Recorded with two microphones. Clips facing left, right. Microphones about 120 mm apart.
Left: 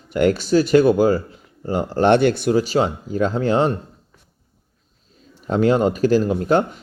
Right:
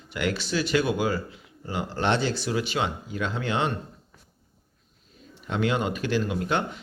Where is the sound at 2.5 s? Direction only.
35° left (ahead or behind).